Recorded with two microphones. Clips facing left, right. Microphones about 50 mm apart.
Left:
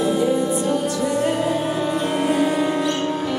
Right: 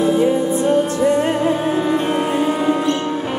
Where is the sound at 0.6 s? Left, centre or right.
Right; by 2.8 s centre.